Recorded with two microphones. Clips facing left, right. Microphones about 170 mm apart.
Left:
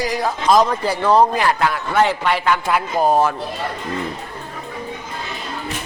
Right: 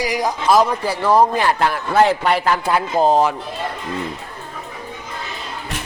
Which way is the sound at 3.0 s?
15° right (ahead or behind).